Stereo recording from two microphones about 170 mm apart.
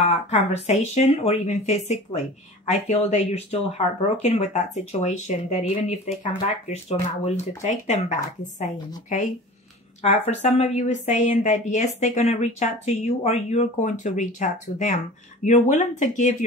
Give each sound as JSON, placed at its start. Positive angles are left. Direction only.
{"t": 0.3, "sound": "a woman's voice", "side_deg": 40}
{"t": 10.4, "sound": "a woman's voice", "side_deg": 40}